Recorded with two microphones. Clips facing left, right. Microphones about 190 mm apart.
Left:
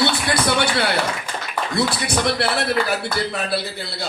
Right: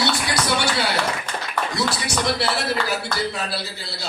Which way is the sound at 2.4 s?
60° left (ahead or behind).